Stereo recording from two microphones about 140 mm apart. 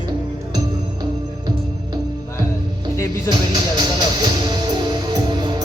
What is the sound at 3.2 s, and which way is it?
Music, 30° right (ahead or behind).